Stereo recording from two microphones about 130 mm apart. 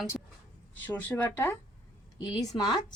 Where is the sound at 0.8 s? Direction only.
15° left (ahead or behind).